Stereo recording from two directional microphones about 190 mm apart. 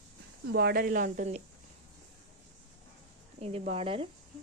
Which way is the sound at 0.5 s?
55° right (ahead or behind).